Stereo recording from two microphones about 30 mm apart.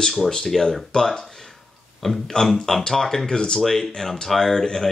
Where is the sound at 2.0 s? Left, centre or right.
Centre.